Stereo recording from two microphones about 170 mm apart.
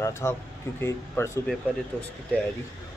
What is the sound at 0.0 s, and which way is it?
Speech, 15° left (ahead or behind).